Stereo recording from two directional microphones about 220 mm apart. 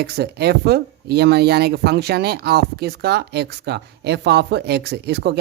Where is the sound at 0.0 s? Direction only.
45° right (ahead or behind).